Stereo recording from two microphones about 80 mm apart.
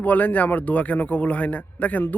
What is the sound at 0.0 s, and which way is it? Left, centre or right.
A man's voice, left.